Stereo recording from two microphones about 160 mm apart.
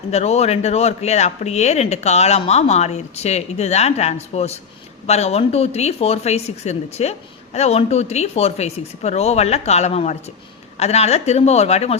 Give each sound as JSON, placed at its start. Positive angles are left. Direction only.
{"t": 0.1, "sound": "speech", "side_deg": 40}